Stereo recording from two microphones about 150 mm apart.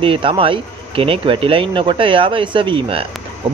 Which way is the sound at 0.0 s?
35° right (ahead or behind).